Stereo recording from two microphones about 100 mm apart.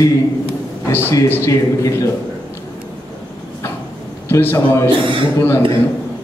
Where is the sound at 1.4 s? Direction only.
30° left (ahead or behind).